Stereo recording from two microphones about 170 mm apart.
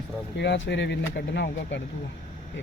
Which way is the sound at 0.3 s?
90° left.